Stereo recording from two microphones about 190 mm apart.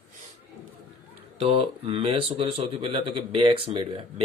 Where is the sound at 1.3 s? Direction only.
30° right (ahead or behind).